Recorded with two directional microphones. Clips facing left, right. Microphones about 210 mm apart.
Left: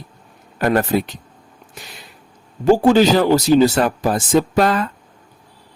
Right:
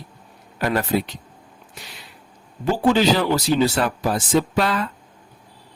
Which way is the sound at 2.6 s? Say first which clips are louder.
Left 6 dB; 45° left (ahead or behind).